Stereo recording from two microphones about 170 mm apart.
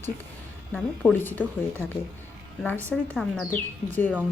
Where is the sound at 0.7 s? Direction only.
10° left (ahead or behind).